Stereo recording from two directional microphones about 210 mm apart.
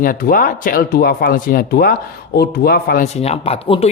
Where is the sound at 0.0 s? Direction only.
40° left (ahead or behind).